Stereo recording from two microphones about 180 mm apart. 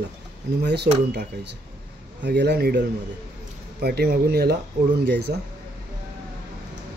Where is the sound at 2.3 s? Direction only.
70° right (ahead or behind).